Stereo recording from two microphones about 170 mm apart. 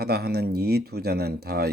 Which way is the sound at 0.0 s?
70° right (ahead or behind).